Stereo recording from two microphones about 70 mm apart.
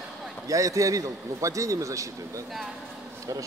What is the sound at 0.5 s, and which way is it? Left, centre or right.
A man's voice, right.